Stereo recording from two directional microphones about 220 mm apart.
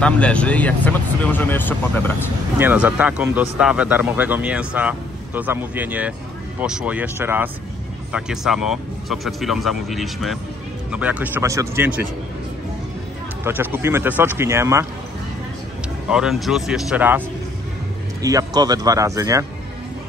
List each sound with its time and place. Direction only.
0.0 s speech: 5° left (ahead or behind)
2.6 s speech: 5° right (ahead or behind)
13.4 s speech: 10° right (ahead or behind)
16.1 s speech: centre (ahead or behind)
18.2 s speech: 15° right (ahead or behind)